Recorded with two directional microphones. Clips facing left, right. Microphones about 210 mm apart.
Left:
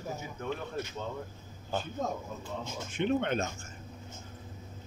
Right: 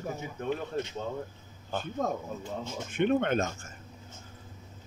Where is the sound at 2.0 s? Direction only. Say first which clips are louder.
Right 3 dB; 55° right (ahead or behind).